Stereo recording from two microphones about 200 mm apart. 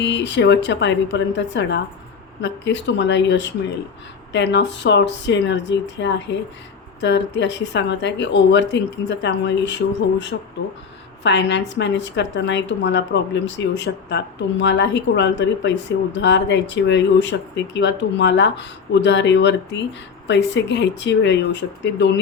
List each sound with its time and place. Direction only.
0.0 s a woman's voice: 65° left (ahead or behind)